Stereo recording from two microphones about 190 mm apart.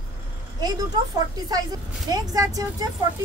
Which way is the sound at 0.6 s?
20° right (ahead or behind).